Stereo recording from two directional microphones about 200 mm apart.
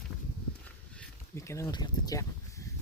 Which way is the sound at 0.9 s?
15° left (ahead or behind).